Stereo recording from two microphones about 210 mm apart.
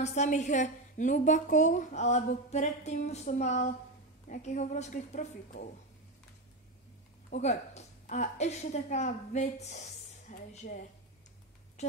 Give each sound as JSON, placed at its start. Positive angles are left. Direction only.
{"t": 0.0, "sound": "a woman's voice", "side_deg": 35}
{"t": 7.2, "sound": "a woman's voice", "side_deg": 35}